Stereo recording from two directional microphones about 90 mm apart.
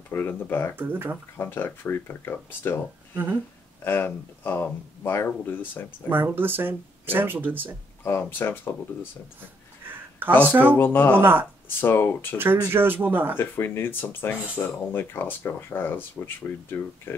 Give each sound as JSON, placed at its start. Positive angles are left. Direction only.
{"t": 0.1, "sound": "speech", "side_deg": 25}
{"t": 0.7, "sound": "speech", "side_deg": -20}
{"t": 1.4, "sound": "speech", "side_deg": 25}
{"t": 3.8, "sound": "speech", "side_deg": 20}
{"t": 6.0, "sound": "speech", "side_deg": -20}
{"t": 8.2, "sound": "speech", "side_deg": 25}
{"t": 10.5, "sound": "speech", "side_deg": -20}
{"t": 10.8, "sound": "speech", "side_deg": 25}
{"t": 11.1, "sound": "speech", "side_deg": -25}
{"t": 11.6, "sound": "speech", "side_deg": 25}
{"t": 12.4, "sound": "speech", "side_deg": -25}
{"t": 13.4, "sound": "speech", "side_deg": 25}